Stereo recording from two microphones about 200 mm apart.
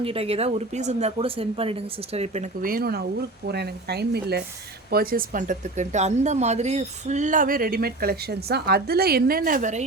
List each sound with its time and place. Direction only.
0.0 s speech: 30° right (ahead or behind)